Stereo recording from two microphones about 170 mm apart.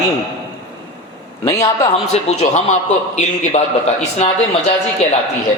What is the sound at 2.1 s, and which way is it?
Speech, 40° left (ahead or behind).